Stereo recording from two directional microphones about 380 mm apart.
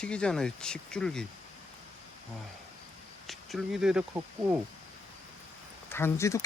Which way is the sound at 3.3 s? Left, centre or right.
Centre.